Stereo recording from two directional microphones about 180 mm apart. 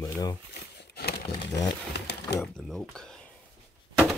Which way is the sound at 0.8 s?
65° left (ahead or behind).